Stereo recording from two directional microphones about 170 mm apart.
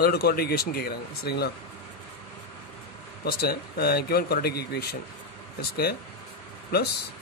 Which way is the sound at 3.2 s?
65° left (ahead or behind).